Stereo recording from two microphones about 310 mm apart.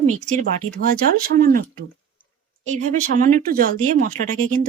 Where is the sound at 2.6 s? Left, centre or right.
Right.